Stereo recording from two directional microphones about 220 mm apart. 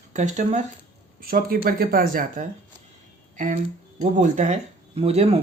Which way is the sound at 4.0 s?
35° right (ahead or behind).